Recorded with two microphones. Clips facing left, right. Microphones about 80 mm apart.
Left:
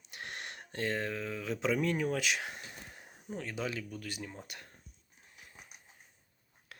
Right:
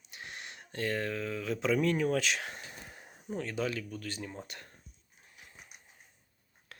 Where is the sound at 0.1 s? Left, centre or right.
Left.